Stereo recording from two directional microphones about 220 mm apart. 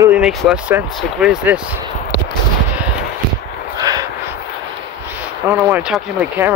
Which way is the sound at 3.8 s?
15° right (ahead or behind).